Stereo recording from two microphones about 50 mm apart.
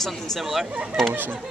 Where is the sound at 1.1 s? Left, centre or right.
Right.